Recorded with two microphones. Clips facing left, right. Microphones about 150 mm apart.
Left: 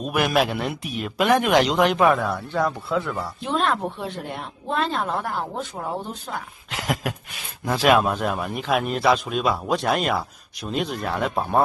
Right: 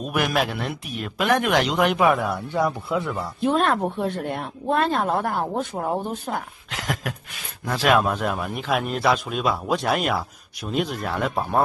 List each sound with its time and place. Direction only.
0.0 s a man's voice: centre (ahead or behind)
2.5 s a man's voice: 15° right (ahead or behind)
3.3 s speech: 55° right (ahead or behind)
6.7 s a man's voice: 5° left (ahead or behind)